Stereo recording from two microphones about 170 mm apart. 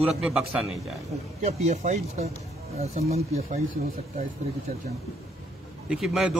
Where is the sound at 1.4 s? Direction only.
45° right (ahead or behind).